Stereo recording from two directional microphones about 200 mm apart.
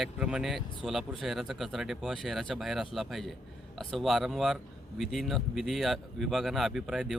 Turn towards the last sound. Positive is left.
turn(degrees=0)  # may be behind; listen again after turning